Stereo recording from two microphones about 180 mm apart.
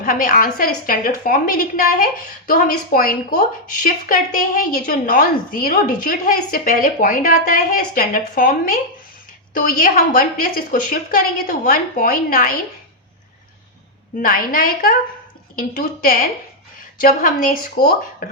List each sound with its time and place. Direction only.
0.0 s a woman's voice: 50° left (ahead or behind)
14.2 s a woman's voice: 50° left (ahead or behind)